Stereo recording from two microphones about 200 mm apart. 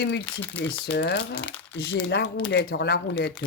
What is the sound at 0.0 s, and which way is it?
Speech, 55° left (ahead or behind).